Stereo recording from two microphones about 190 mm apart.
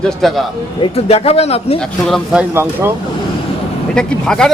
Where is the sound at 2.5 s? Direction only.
10° right (ahead or behind).